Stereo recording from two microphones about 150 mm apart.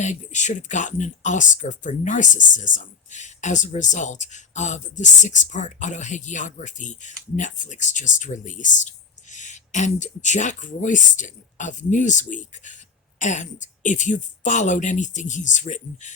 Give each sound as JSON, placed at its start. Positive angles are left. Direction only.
{"t": 0.0, "sound": "speech", "side_deg": 50}